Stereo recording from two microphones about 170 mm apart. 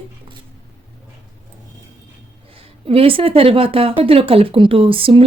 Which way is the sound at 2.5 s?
35° right (ahead or behind).